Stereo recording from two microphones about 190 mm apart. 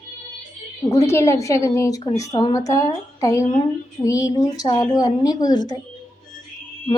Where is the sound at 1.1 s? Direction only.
15° left (ahead or behind).